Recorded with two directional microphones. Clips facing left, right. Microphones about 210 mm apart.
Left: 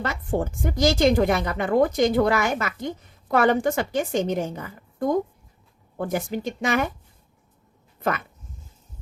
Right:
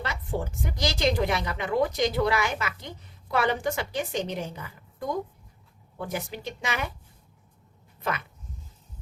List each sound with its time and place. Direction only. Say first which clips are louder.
0.0 s a woman's voice: left 6 dB; 50° left (ahead or behind)
8.0 s a woman's voice: left 5 dB; 50° left (ahead or behind)